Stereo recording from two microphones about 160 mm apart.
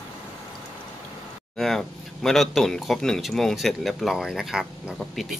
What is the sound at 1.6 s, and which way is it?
Speech, centre (ahead or behind).